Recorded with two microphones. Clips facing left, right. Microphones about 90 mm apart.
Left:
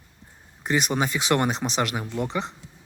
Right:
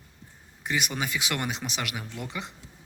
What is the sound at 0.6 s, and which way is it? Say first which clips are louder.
Speech: left 6 dB; 35° left (ahead or behind).